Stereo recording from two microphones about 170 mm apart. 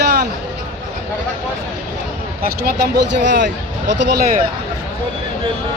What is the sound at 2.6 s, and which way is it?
Speech, 90° right.